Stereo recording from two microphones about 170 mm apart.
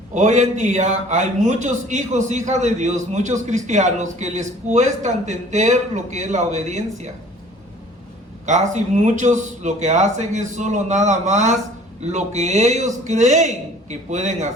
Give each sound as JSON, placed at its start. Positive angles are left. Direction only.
{"t": 0.1, "sound": "a man's voice", "side_deg": -45}
{"t": 8.4, "sound": "a man's voice", "side_deg": -45}